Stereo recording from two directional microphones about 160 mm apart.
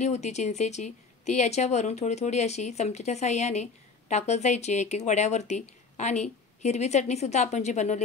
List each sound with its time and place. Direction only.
0.0 s speech: 45° left (ahead or behind)